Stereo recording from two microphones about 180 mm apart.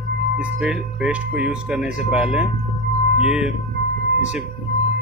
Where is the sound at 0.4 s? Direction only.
5° right (ahead or behind).